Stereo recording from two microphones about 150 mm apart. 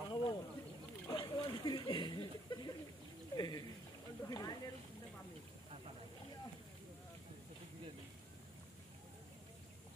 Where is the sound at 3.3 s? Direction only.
25° left (ahead or behind).